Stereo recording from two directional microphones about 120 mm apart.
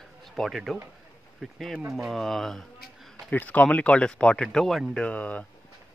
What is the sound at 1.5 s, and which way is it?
Speech, centre (ahead or behind).